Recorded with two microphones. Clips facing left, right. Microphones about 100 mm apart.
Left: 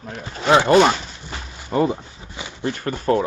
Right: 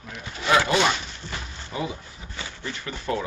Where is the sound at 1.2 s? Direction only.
15° left (ahead or behind).